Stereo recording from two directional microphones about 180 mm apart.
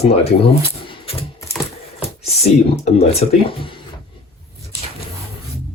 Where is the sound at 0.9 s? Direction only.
30° left (ahead or behind).